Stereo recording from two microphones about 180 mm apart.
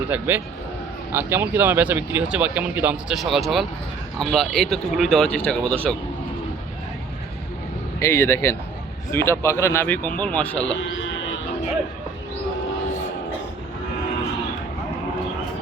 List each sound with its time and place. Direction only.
0.1 s speech: 10° right (ahead or behind)
7.9 s speech: 15° left (ahead or behind)
10.9 s sheep: 90° left